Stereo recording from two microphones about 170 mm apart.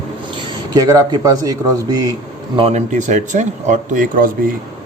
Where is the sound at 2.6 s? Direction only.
40° right (ahead or behind); by 4.5 s 55° right (ahead or behind).